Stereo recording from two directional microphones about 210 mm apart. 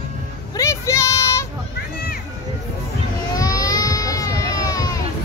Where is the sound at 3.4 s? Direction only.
15° left (ahead or behind).